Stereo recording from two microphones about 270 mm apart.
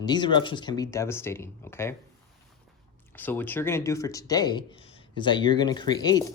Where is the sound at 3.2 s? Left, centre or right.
Centre.